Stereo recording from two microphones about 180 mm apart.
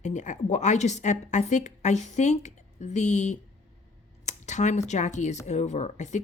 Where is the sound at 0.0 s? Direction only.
40° left (ahead or behind).